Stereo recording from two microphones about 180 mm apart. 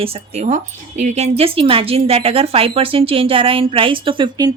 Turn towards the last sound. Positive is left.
turn(degrees=-25)  # may be behind; listen again after turning